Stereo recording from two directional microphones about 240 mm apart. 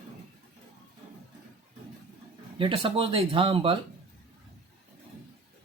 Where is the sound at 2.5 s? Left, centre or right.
Right.